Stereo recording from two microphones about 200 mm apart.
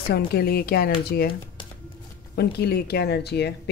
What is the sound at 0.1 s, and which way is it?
Speech, 50° left (ahead or behind).